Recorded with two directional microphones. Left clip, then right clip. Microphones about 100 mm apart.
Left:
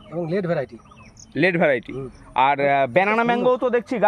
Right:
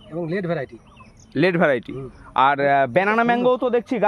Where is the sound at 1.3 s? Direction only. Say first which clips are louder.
Even; 65° right (ahead or behind).